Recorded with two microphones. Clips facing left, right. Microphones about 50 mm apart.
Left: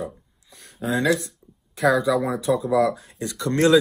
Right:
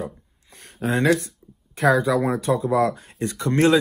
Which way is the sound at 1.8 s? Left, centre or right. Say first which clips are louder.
Right 1 dB; right.